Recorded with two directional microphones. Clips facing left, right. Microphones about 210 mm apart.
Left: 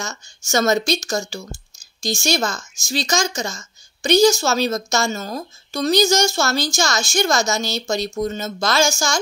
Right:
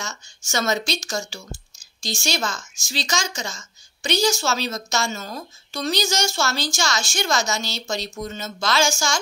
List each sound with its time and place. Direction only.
0.0 s speech: 45° left (ahead or behind)